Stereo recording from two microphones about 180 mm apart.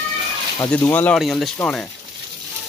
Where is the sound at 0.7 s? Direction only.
10° left (ahead or behind).